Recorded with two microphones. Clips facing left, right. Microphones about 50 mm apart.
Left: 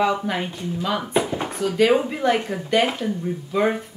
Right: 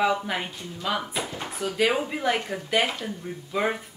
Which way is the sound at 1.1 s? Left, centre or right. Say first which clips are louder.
Left 9 dB; centre.